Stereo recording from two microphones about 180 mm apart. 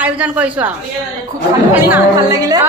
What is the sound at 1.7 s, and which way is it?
Speech, 15° right (ahead or behind).